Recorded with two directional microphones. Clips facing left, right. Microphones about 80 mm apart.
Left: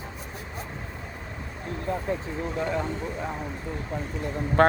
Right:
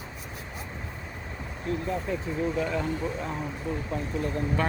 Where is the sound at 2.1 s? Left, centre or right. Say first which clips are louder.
Left 2 dB; left.